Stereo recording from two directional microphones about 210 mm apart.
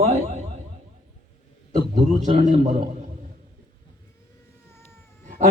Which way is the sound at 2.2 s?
30° right (ahead or behind).